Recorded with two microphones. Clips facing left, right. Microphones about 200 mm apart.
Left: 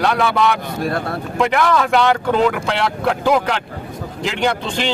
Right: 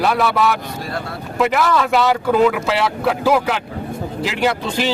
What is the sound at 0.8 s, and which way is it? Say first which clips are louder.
Speech: left 5 dB; 55° left (ahead or behind).